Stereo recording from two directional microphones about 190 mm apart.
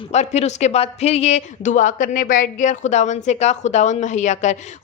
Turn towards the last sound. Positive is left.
turn(degrees=40)  # may be behind; listen again after turning